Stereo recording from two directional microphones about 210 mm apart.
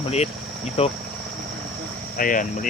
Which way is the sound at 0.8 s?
30° left (ahead or behind).